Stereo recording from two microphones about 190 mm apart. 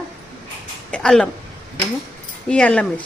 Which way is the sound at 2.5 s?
5° left (ahead or behind).